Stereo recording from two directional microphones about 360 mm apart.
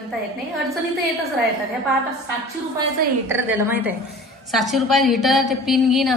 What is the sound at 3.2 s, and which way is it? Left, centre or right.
A woman's voice, centre.